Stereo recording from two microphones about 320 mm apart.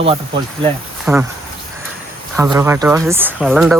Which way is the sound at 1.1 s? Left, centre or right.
Centre.